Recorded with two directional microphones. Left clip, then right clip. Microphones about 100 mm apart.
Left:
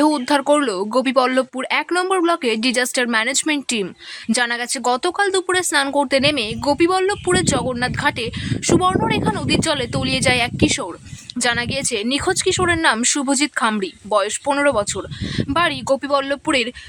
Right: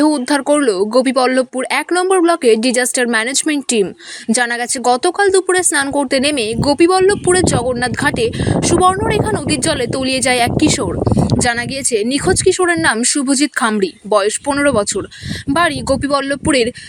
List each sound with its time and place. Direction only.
0.0 s a woman's voice: 25° right (ahead or behind)
7.8 s speech: 35° right (ahead or behind)
11.3 s a woman's voice: 30° right (ahead or behind)
13.6 s speech: 40° right (ahead or behind)